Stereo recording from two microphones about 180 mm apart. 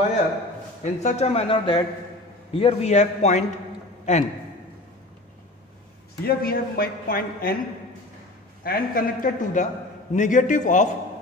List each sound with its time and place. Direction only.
0.9 s a man's voice: 40° left (ahead or behind)
6.2 s a man's voice: 55° left (ahead or behind)
8.6 s speech: 55° left (ahead or behind)